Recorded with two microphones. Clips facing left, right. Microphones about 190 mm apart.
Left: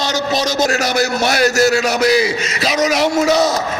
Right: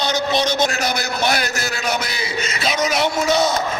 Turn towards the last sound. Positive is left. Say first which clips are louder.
# left 4 dB
turn(degrees=40)  # may be behind; listen again after turning